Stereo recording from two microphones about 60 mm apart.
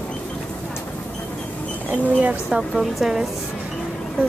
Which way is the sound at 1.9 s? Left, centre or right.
Right.